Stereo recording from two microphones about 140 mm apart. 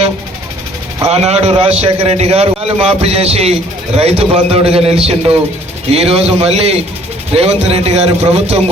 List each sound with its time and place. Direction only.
1.0 s a man's voice: 50° right (ahead or behind)